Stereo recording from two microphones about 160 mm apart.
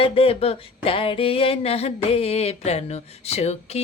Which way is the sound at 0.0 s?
35° left (ahead or behind).